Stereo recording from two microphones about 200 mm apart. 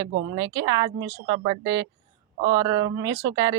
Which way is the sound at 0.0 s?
20° right (ahead or behind).